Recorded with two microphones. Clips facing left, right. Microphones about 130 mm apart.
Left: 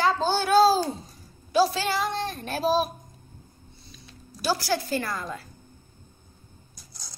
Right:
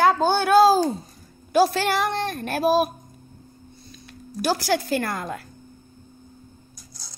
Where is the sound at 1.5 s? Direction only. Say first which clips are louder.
Right 3 dB; 55° right (ahead or behind).